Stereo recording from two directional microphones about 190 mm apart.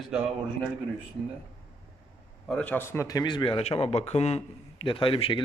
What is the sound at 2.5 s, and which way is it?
Speech, 10° left (ahead or behind).